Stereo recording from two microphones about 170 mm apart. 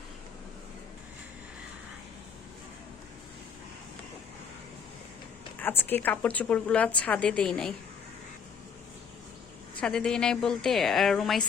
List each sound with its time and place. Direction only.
5.5 s a woman's voice: 10° left (ahead or behind)
9.8 s a woman's voice: 5° left (ahead or behind)